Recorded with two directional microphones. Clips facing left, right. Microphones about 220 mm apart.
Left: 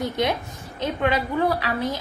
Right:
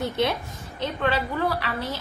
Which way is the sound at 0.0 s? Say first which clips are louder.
Left 1 dB; 15° left (ahead or behind).